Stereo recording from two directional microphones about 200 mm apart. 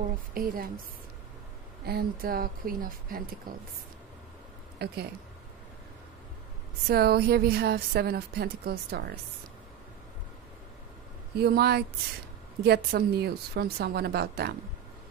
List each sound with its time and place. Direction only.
0.3 s speech: 45° right (ahead or behind)
1.9 s speech: 50° right (ahead or behind)
4.7 s speech: 55° right (ahead or behind)
6.9 s speech: 50° right (ahead or behind)
11.3 s speech: 50° right (ahead or behind)